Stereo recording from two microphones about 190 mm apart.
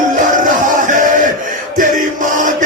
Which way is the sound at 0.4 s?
45° right (ahead or behind).